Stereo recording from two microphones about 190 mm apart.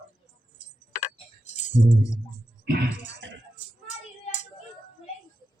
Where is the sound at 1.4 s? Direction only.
40° left (ahead or behind).